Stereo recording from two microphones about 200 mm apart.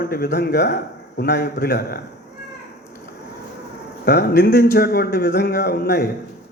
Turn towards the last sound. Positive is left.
turn(degrees=55)  # may be behind; listen again after turning